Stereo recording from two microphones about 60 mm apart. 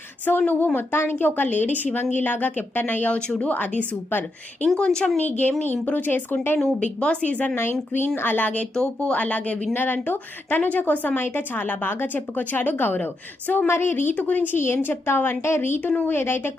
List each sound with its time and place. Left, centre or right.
0.3 s a woman's voice: left
4.8 s speech: centre
5.2 s a woman's voice: left
6.7 s speech: centre
7.5 s a woman's voice: left
8.7 s speech: centre
9.7 s a woman's voice: left
15.8 s speech: left
16.1 s a woman's voice: left